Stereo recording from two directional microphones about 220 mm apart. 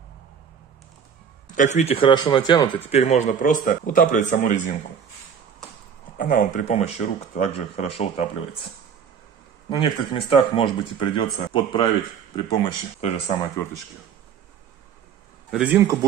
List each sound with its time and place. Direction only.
1.5 s speech: 35° left (ahead or behind)
2.9 s speech: 30° left (ahead or behind)
6.1 s speech: 40° left (ahead or behind)
9.7 s speech: 25° left (ahead or behind)
15.5 s speech: 5° right (ahead or behind)